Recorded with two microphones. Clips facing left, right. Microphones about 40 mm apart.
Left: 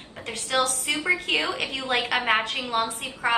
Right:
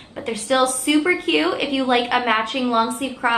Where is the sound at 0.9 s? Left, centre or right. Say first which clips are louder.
Right 9 dB; right.